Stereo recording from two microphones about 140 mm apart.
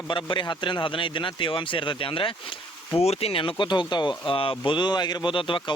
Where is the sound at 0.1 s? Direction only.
35° left (ahead or behind).